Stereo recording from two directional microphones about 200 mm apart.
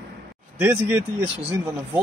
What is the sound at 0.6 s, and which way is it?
Speech, 10° right (ahead or behind).